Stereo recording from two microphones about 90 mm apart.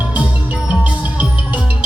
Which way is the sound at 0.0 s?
15° right (ahead or behind).